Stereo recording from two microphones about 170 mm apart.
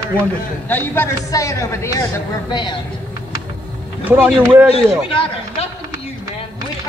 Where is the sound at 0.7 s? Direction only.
10° left (ahead or behind).